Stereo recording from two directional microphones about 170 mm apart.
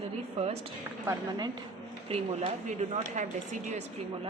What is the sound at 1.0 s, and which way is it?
Speech, 25° right (ahead or behind).